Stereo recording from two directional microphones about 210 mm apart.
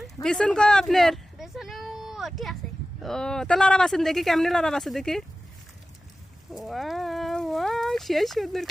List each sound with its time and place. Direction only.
0.0 s a sound: 5° left (ahead or behind)
3.0 s speech: 5° left (ahead or behind)
6.5 s speech: centre (ahead or behind)